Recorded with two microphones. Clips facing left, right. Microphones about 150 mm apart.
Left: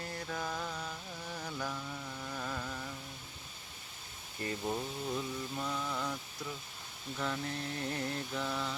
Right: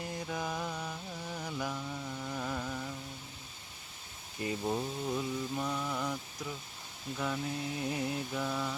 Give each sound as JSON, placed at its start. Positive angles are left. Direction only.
{"t": 0.0, "sound": "music", "side_deg": -15}
{"t": 4.4, "sound": "mantra", "side_deg": -15}
{"t": 7.2, "sound": "mantra", "side_deg": -10}